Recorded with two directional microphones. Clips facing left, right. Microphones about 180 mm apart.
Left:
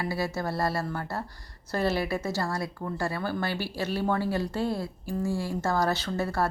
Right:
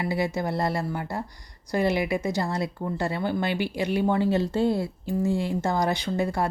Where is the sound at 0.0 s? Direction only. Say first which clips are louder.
Right 3 dB; 20° right (ahead or behind).